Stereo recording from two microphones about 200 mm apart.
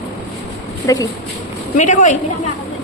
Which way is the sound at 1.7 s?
35° left (ahead or behind).